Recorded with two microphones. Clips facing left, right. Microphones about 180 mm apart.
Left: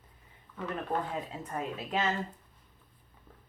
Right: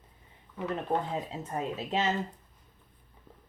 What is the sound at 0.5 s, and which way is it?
Speech, 20° right (ahead or behind).